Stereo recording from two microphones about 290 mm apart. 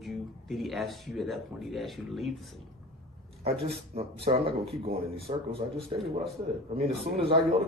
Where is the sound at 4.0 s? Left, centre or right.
Right.